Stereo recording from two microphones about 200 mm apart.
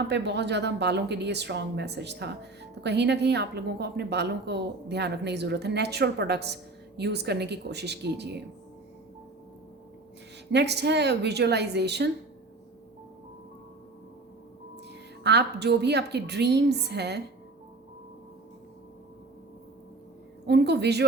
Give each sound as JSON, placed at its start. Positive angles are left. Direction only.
{"t": 0.1, "sound": "a woman's voice", "side_deg": -60}
{"t": 10.5, "sound": "a woman's voice", "side_deg": -55}
{"t": 15.2, "sound": "a woman's voice", "side_deg": -55}
{"t": 20.5, "sound": "a woman's voice", "side_deg": -55}